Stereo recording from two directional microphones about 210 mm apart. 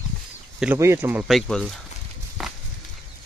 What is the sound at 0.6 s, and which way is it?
Speech, 10° right (ahead or behind).